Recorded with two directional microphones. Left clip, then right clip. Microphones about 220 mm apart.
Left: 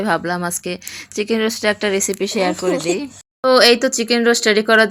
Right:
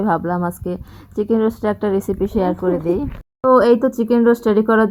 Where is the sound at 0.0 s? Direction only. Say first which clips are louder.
Even; 40° left (ahead or behind).